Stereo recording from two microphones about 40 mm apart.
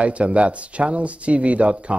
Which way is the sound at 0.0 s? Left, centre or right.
Right.